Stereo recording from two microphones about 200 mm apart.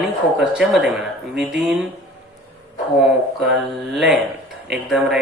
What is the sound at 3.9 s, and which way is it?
Speech, centre (ahead or behind).